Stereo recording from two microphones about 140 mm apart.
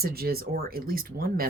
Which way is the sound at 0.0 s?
90° right.